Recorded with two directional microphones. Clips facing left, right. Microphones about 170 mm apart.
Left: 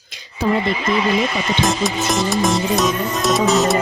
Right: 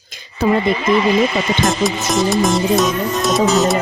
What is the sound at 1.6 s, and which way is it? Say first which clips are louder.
Music: right 2 dB; centre (ahead or behind).